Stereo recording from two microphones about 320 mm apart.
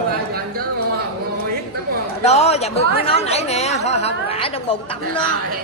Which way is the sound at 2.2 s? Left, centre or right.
Centre.